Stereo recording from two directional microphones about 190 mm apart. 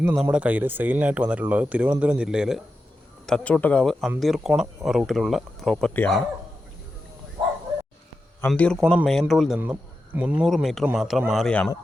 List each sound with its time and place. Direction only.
0.2 s speech: 5° right (ahead or behind)
8.4 s speech: 5° left (ahead or behind)